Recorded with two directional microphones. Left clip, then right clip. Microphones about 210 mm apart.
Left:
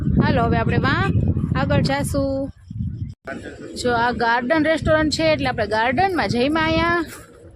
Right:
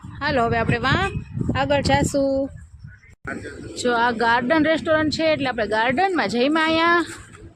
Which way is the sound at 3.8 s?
Centre (ahead or behind).